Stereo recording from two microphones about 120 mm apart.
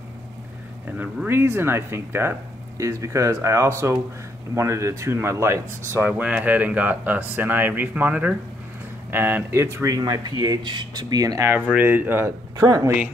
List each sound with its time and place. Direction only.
0.9 s speech: 15° right (ahead or behind)